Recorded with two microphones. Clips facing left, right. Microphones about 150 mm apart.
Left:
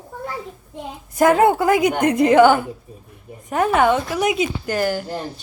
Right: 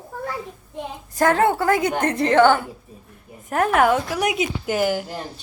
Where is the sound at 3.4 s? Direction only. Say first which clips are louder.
Left 1 dB; centre (ahead or behind).